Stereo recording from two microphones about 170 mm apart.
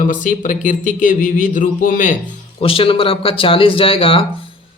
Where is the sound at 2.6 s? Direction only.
35° left (ahead or behind).